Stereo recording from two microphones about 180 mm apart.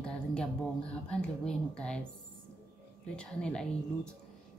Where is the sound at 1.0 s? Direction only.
5° left (ahead or behind).